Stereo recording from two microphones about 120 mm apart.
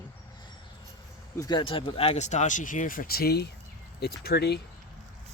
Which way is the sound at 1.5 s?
40° left (ahead or behind).